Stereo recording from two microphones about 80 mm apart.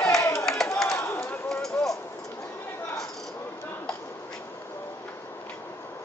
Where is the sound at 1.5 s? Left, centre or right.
Centre.